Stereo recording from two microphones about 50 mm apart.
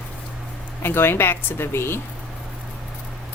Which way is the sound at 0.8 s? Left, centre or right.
Left.